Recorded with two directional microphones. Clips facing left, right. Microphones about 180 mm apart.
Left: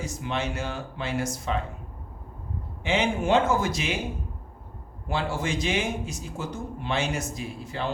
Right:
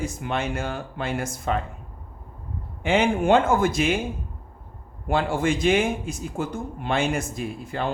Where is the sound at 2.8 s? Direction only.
55° right (ahead or behind).